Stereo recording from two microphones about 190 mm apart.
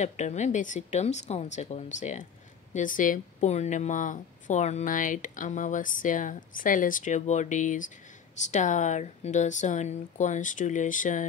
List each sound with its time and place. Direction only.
0.0 s speech: 40° left (ahead or behind)